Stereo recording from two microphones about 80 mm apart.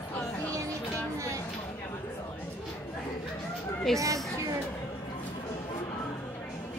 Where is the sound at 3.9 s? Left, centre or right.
Centre.